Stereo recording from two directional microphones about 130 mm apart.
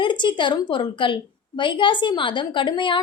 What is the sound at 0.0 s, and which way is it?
A woman's voice, 35° left (ahead or behind).